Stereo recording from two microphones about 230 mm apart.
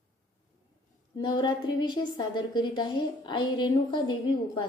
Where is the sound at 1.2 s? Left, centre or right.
Centre.